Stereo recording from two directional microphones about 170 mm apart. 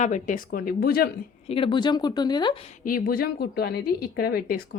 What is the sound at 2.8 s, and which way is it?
A woman's voice, 55° left (ahead or behind).